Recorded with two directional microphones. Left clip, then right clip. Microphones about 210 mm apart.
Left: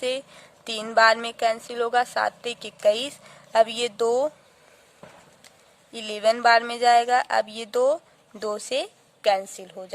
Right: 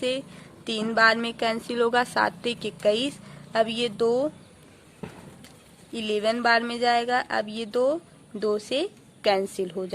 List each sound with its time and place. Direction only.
0.0 s speech: 30° left (ahead or behind)
5.9 s a woman's voice: 30° left (ahead or behind)